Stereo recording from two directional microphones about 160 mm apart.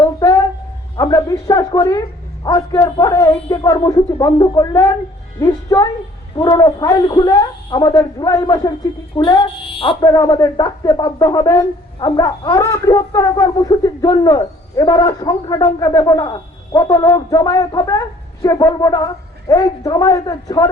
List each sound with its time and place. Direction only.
0.2 s a sound: 20° left (ahead or behind)
0.9 s a man's voice: 20° left (ahead or behind)
10.1 s speech: 20° left (ahead or behind)